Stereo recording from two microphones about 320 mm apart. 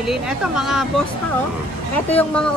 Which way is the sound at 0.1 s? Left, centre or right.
Centre.